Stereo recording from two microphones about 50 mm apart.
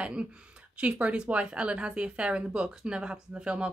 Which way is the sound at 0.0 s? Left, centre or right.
Right.